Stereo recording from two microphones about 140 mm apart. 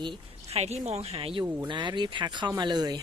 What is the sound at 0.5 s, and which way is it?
A woman's voice, 50° right (ahead or behind).